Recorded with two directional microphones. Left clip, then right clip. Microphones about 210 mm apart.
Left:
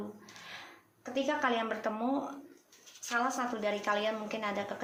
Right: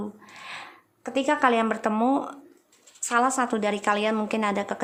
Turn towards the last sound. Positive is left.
turn(degrees=-50)  # may be behind; listen again after turning